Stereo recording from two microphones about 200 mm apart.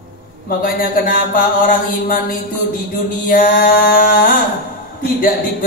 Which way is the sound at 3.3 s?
45° left (ahead or behind).